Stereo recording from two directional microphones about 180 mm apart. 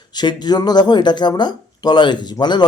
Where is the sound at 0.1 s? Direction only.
25° left (ahead or behind).